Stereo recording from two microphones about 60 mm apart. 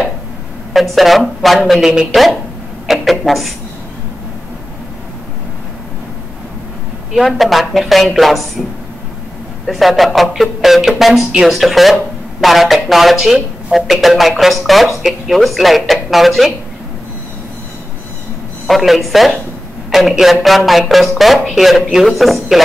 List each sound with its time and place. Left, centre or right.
0.7 s speech: centre
7.2 s speech: centre
9.7 s speech: centre
18.7 s speech: centre